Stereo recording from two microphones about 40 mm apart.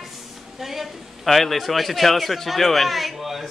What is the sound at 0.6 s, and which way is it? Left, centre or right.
A man's voice, centre.